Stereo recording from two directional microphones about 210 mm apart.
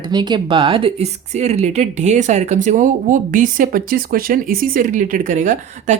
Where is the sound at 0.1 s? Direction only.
20° right (ahead or behind).